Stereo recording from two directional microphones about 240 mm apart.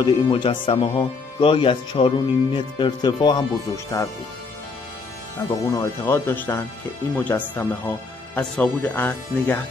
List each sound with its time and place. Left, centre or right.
0.0 s speech: left
5.7 s speech: centre